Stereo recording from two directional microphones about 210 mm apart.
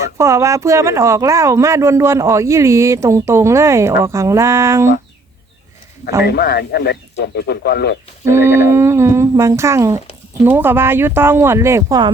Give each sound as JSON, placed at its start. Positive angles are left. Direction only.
{"t": 0.2, "sound": "speech", "side_deg": -15}
{"t": 6.2, "sound": "speech", "side_deg": 50}
{"t": 8.3, "sound": "speech", "side_deg": -10}